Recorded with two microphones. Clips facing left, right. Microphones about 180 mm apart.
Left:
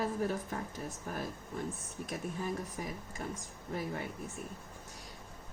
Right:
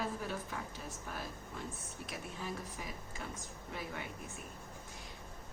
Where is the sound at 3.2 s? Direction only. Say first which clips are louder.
Left 6 dB; 40° left (ahead or behind).